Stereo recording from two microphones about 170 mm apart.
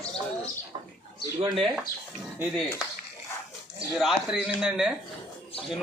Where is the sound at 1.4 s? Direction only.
35° right (ahead or behind).